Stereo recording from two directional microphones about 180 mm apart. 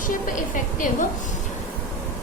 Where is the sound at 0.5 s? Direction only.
45° left (ahead or behind).